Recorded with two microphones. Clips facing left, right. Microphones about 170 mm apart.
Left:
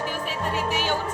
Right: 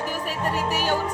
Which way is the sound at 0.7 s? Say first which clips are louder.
Right 1 dB; 40° right (ahead or behind).